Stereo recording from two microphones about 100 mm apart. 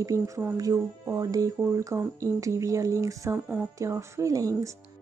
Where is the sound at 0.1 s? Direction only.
30° right (ahead or behind).